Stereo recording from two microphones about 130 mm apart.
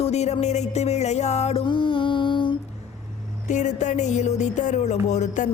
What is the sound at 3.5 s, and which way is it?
Speech, 65° left (ahead or behind).